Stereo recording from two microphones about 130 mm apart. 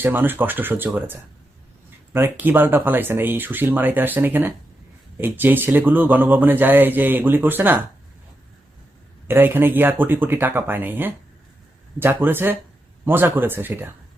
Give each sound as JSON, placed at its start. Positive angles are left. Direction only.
{"t": 0.0, "sound": "speech", "side_deg": -15}
{"t": 9.2, "sound": "speech", "side_deg": -15}